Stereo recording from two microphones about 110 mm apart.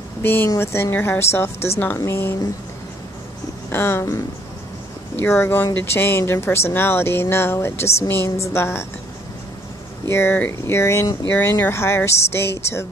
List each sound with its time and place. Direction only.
0.2 s speech: 20° left (ahead or behind)
3.7 s speech: 20° left (ahead or behind)
10.0 s speech: 20° left (ahead or behind)